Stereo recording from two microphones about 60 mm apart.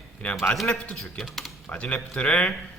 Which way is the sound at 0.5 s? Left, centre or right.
Centre.